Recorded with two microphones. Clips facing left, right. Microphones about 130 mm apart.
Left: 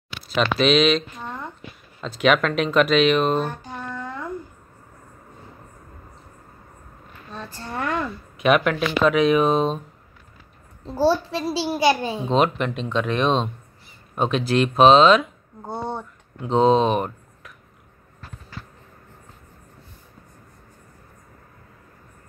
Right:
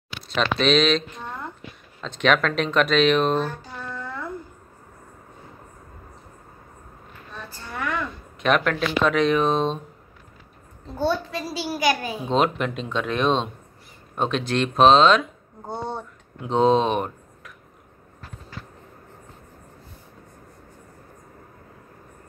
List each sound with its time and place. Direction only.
0.3 s speech: 5° left (ahead or behind)
3.4 s a sound: 20° left (ahead or behind)
7.6 s a sound: 35° left (ahead or behind)
8.4 s speech: 5° left (ahead or behind)
11.0 s a child's voice: 30° left (ahead or behind)
12.3 s speech: centre (ahead or behind)